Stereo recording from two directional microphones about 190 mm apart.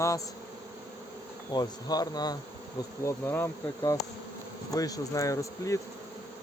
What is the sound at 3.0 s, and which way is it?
Insect, 15° left (ahead or behind).